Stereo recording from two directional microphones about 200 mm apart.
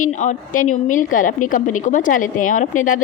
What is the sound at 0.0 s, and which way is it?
A woman's voice, 40° left (ahead or behind).